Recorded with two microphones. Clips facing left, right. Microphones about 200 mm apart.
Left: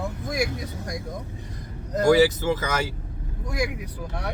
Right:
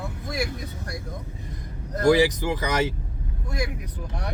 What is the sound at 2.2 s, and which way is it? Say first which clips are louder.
Speech: left 2 dB; 15° right (ahead or behind).